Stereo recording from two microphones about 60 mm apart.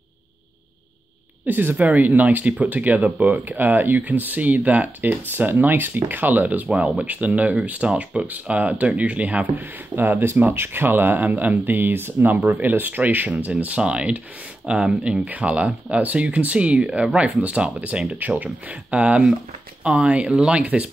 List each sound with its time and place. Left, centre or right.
1.4 s speech: right
9.9 s speech: right